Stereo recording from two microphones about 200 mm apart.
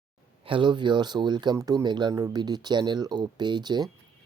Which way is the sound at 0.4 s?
25° right (ahead or behind).